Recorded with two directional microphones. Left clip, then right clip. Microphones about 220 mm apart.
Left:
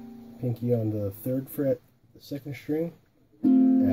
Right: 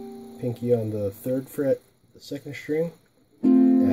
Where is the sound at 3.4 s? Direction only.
25° right (ahead or behind).